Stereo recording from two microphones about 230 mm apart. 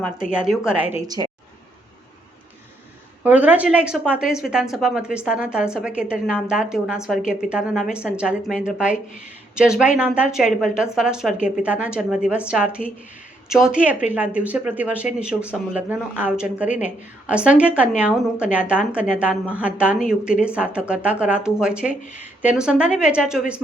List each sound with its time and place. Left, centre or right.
0.0 s speech: centre
0.9 s a woman's voice: centre
3.2 s speech: centre